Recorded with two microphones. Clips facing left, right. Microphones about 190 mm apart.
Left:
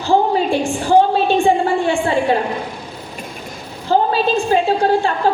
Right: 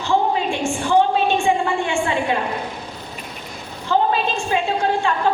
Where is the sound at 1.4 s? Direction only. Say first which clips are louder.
Left 4 dB; 35° left (ahead or behind).